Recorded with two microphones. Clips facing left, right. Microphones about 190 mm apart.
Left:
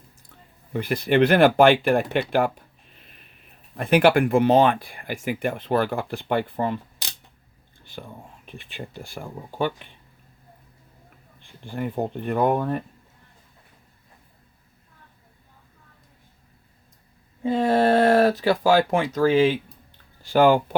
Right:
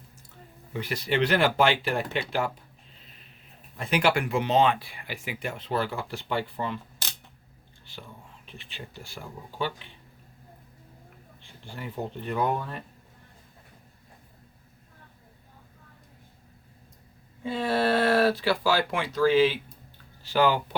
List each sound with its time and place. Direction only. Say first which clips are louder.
0.7 s speech: left 7 dB; 55° left (ahead or behind)
3.8 s speech: left 7 dB; 55° left (ahead or behind)
7.9 s speech: left 6 dB; 50° left (ahead or behind)
11.4 s speech: left 10 dB; 55° left (ahead or behind)
17.4 s speech: left 6 dB; 45° left (ahead or behind)